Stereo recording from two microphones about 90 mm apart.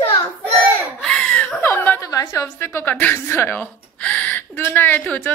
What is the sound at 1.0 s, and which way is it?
Laughter, 10° left (ahead or behind).